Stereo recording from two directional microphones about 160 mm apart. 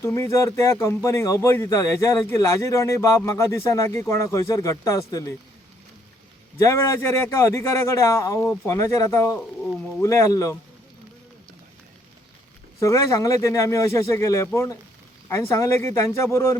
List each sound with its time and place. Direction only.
0.0 s a man's voice: 15° left (ahead or behind)
6.6 s a man's voice: 15° left (ahead or behind)
12.8 s a man's voice: 20° left (ahead or behind)